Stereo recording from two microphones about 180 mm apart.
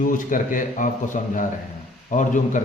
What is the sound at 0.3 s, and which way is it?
Speech, 45° left (ahead or behind).